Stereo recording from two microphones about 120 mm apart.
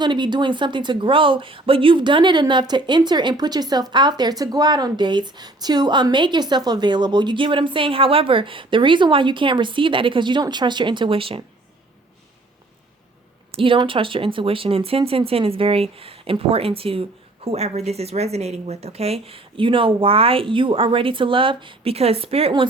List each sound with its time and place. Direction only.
0.0 s a woman's voice: 40° right (ahead or behind)
13.5 s speech: 50° right (ahead or behind)